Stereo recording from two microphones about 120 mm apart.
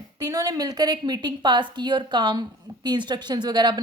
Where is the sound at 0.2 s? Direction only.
30° right (ahead or behind).